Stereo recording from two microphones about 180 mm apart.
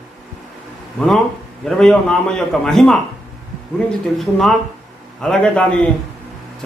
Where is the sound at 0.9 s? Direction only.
5° left (ahead or behind).